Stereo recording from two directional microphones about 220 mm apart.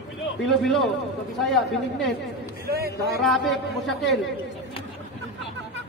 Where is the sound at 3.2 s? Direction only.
Centre (ahead or behind).